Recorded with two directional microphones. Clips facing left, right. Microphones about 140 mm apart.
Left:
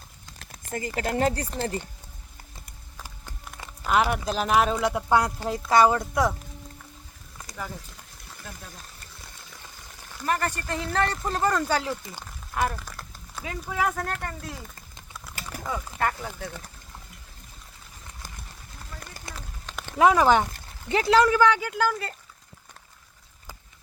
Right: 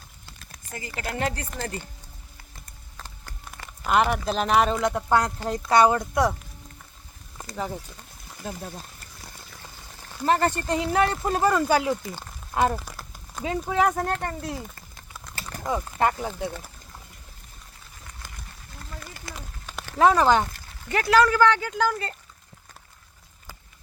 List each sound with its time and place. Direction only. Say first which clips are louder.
0.9 s speech: left 4 dB; 40° left (ahead or behind)
3.8 s speech: right 1 dB; centre (ahead or behind)
7.5 s speech: right 6 dB; 25° right (ahead or behind)
8.4 s speech: right 9 dB; 35° right (ahead or behind)
10.2 s speech: right 5 dB; 30° right (ahead or behind); by 11.9 s 10° right (ahead or behind)
12.5 s speech: right 4 dB; 30° right (ahead or behind)
15.4 s a sound: even; 10° left (ahead or behind)
15.6 s speech: right 4 dB; 20° right (ahead or behind)
19.4 s a sound: right 1 dB; 5° right (ahead or behind)
20.0 s speech: even; 10° left (ahead or behind)